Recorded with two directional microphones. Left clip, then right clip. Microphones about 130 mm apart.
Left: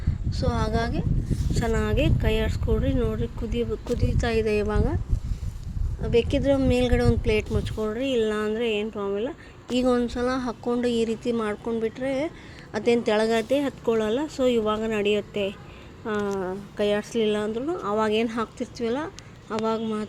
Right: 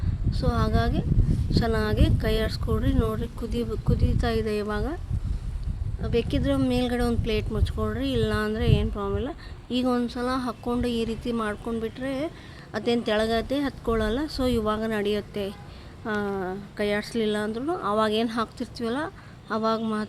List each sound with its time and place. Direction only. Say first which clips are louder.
0.3 s a woman's voice: even; 20° left (ahead or behind); by 3.7 s 5° right (ahead or behind)
3.9 s speech: left 3 dB; 15° left (ahead or behind)
6.0 s speech: left 4 dB; 15° left (ahead or behind)
7.8 s a woman's voice: left 3 dB; centre (ahead or behind)
9.7 s a woman's voice: left 3 dB; 10° left (ahead or behind)